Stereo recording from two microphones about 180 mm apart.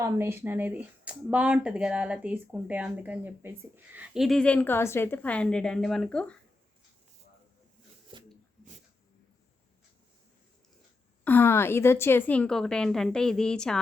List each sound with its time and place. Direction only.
0.0 s speech: 15° right (ahead or behind); by 6.4 s 5° left (ahead or behind)
8.1 s a sound: 30° right (ahead or behind)
11.2 s a woman's voice: 10° left (ahead or behind)